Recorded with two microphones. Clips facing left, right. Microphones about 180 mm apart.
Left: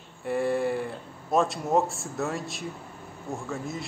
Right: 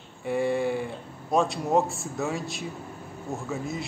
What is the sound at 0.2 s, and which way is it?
A man's voice, centre (ahead or behind).